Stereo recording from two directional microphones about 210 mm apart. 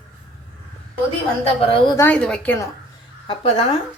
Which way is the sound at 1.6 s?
25° left (ahead or behind).